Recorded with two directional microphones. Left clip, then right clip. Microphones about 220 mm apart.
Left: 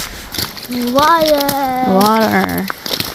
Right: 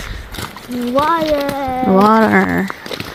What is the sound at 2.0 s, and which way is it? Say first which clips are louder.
Insect: right 3 dB; 25° right (ahead or behind).